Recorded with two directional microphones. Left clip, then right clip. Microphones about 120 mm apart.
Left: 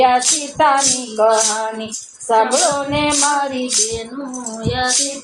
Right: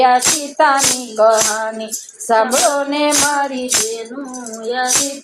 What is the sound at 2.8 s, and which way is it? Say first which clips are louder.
Music: right 1 dB; 40° right (ahead or behind).